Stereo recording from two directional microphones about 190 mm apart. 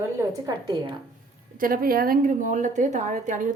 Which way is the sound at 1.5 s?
50° right (ahead or behind).